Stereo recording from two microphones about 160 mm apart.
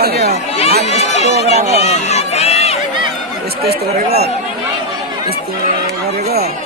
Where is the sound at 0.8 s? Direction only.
40° left (ahead or behind).